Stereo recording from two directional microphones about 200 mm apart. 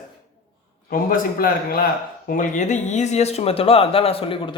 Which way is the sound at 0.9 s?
45° left (ahead or behind).